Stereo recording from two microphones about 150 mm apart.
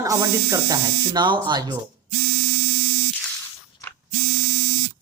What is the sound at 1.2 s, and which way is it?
Speech, 30° right (ahead or behind).